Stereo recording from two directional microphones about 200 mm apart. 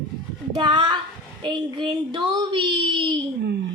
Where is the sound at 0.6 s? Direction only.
20° right (ahead or behind).